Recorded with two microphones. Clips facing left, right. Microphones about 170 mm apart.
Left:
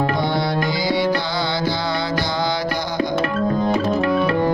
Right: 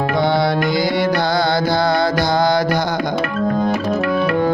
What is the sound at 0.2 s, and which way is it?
Music, 60° right (ahead or behind).